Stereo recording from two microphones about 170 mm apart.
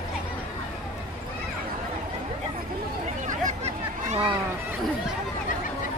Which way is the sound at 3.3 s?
45° right (ahead or behind).